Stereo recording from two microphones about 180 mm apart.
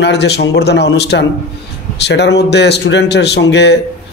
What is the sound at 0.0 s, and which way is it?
A man's voice, 70° left (ahead or behind).